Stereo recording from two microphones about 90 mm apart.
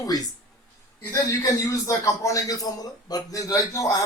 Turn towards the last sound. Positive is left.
turn(degrees=40)  # may be behind; listen again after turning